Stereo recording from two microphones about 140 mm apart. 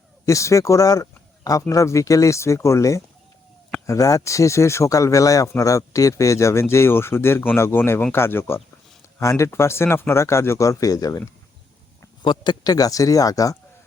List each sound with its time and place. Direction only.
0.3 s speech: 20° left (ahead or behind)
12.2 s speech: 35° left (ahead or behind)